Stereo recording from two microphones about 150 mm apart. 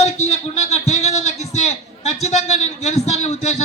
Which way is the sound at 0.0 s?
45° left (ahead or behind).